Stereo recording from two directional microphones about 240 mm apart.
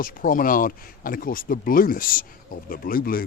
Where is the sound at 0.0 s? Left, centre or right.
Left.